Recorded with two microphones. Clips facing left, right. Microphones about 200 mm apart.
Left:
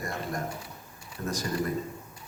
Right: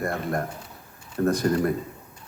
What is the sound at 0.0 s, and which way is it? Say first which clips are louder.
A man's voice: right 6 dB; 60° right (ahead or behind).